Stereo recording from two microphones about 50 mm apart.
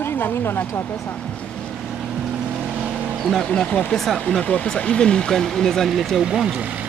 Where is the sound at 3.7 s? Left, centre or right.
Left.